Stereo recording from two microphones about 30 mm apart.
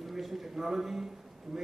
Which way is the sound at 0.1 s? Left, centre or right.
Centre.